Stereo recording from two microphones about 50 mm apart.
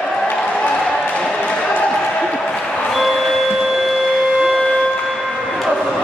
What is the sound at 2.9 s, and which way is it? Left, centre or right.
Printer, centre.